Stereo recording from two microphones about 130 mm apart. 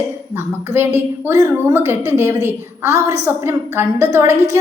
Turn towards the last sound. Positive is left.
turn(degrees=-20)  # may be behind; listen again after turning